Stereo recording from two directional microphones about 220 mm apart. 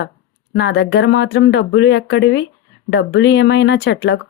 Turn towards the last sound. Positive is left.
turn(degrees=55)  # may be behind; listen again after turning